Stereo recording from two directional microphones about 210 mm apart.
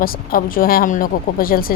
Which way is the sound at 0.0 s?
45° left (ahead or behind).